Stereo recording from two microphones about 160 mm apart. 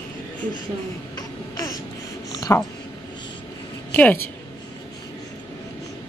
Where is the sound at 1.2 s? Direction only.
20° left (ahead or behind).